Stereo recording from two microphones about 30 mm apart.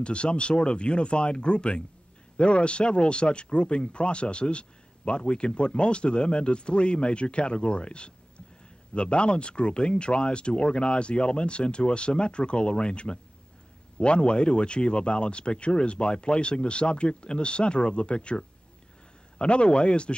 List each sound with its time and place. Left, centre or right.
0.0 s speech: left